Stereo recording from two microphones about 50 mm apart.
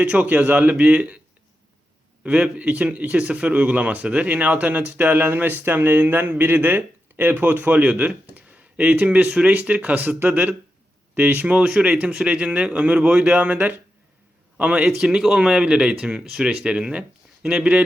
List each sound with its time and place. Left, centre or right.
0.0 s speech: right
2.2 s speech: right
14.8 s speech: centre